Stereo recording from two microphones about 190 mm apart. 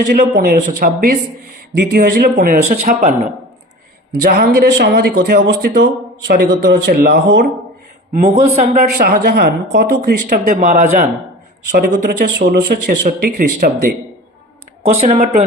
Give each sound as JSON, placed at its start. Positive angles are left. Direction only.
{"t": 0.1, "sound": "a man's voice", "side_deg": -55}
{"t": 4.1, "sound": "a man's voice", "side_deg": -55}
{"t": 8.1, "sound": "speech", "side_deg": -40}